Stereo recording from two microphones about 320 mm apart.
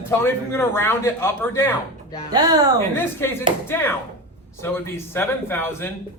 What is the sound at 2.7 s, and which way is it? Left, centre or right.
Speech, centre.